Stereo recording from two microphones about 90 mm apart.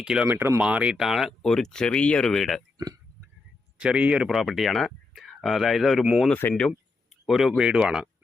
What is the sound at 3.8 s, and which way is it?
Speech, 15° right (ahead or behind).